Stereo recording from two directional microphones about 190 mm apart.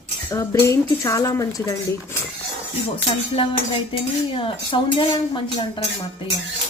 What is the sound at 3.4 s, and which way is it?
Speech, 25° left (ahead or behind).